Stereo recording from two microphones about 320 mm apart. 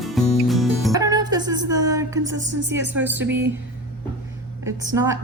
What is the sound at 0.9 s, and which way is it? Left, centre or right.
Music, centre.